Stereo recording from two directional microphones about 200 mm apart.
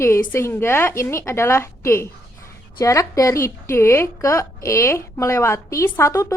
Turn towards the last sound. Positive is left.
turn(degrees=15)  # may be behind; listen again after turning